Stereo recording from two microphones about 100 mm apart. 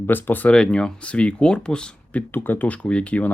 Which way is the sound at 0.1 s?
20° left (ahead or behind).